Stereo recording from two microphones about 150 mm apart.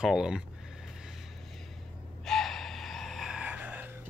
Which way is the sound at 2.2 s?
Centre (ahead or behind).